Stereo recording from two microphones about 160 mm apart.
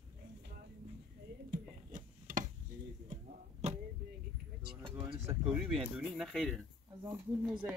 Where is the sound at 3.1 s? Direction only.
45° right (ahead or behind).